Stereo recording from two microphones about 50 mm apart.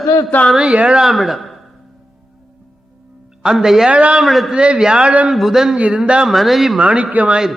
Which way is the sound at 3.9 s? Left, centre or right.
Right.